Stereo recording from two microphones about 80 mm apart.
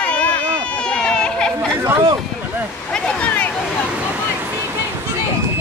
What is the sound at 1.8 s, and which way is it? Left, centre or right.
Speech, right.